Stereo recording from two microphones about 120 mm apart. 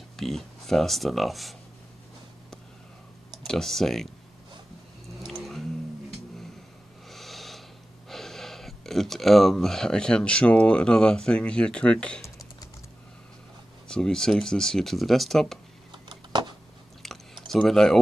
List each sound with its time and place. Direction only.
0.2 s speech: centre (ahead or behind)
3.4 s speech: 5° left (ahead or behind)
5.2 s vehicle: centre (ahead or behind)
7.1 s a sound: centre (ahead or behind)
8.1 s speech: centre (ahead or behind)
13.8 s speech: 5° left (ahead or behind)
15.9 s a sound: 40° right (ahead or behind)
17.5 s speech: centre (ahead or behind)